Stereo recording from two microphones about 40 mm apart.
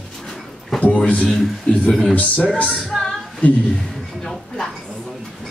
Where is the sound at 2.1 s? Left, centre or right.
Left.